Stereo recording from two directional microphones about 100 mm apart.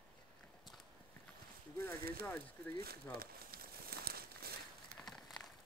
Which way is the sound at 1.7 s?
30° left (ahead or behind).